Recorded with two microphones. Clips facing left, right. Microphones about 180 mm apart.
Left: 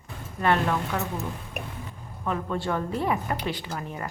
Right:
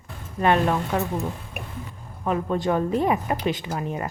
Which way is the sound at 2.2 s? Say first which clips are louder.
Right 5 dB; 20° right (ahead or behind).